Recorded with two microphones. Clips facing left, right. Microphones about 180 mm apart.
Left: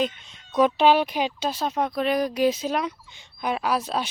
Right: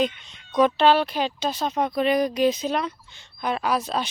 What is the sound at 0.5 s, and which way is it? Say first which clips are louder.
Speech: even; 10° left (ahead or behind).